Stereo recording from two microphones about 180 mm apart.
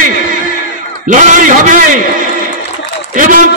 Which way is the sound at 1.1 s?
45° right (ahead or behind).